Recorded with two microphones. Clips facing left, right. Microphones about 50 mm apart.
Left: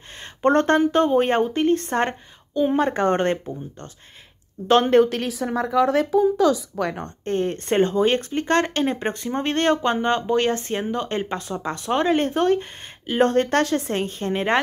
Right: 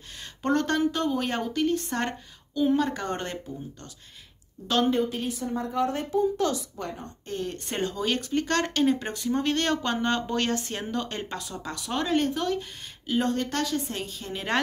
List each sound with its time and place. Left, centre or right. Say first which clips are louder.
0.4 s speech: left 7 dB; left
4.9 s speech: left 10 dB; left
7.2 s a woman's voice: left 10 dB; left